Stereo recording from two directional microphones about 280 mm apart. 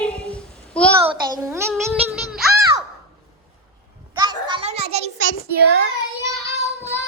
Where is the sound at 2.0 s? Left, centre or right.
Centre.